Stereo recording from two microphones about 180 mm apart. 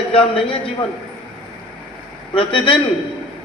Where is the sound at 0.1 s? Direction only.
30° left (ahead or behind).